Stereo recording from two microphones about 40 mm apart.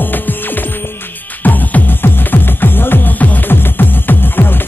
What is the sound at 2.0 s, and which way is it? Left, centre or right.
Music, left.